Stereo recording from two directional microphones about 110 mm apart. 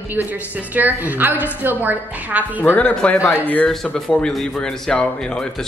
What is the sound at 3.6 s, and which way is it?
Speech, 5° left (ahead or behind).